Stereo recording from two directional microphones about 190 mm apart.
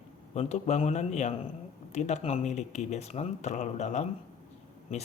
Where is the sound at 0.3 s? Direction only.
35° left (ahead or behind).